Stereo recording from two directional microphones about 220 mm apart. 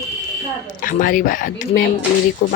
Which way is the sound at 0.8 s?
40° left (ahead or behind).